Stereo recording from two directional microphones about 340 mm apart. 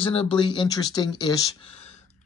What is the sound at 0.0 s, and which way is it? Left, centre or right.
Speech, centre.